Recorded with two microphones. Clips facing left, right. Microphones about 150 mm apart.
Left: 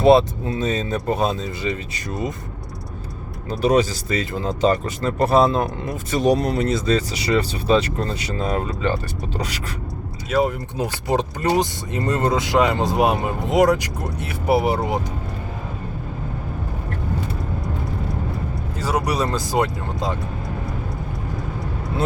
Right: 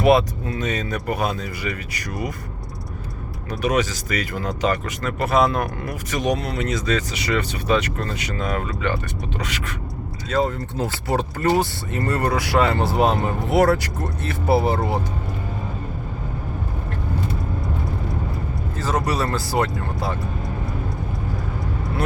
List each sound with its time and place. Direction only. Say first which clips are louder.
0.0 s speech: left 3 dB; 25° left (ahead or behind)
3.5 s speech: left 4 dB; 30° left (ahead or behind)
10.2 s speech: left 2 dB; 10° left (ahead or behind)
18.8 s speech: left 1 dB; 10° left (ahead or behind)